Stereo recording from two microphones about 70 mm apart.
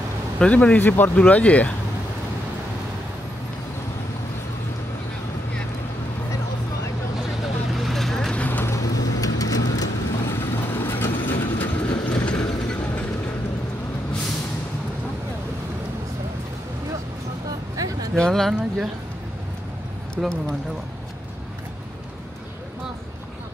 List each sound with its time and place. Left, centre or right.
0.5 s a man's voice: left
7.8 s vehicle: centre
8.4 s vehicle: left
8.6 s vehicle: left
10.2 s vehicle: left
17.7 s a sound: right
18.1 s speech: centre
20.2 s speech: centre